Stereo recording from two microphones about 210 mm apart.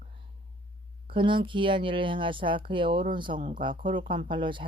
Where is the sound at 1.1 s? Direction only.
25° right (ahead or behind).